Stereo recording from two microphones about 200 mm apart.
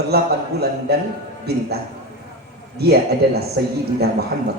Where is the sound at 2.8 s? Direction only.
55° right (ahead or behind).